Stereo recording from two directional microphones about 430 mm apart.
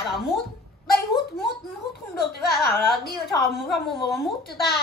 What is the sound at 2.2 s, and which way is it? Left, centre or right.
A woman's voice, left.